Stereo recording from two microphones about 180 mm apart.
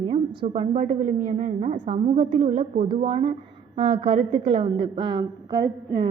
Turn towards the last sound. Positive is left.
turn(degrees=-25)  # may be behind; listen again after turning